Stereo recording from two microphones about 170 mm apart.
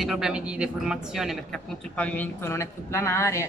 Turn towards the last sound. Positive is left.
turn(degrees=15)  # may be behind; listen again after turning